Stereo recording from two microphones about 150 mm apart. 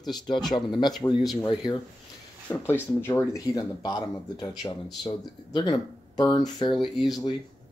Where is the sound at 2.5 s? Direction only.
15° left (ahead or behind); by 6.8 s 35° left (ahead or behind).